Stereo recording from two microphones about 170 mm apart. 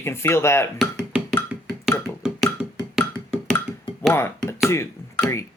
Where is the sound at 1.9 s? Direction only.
5° right (ahead or behind).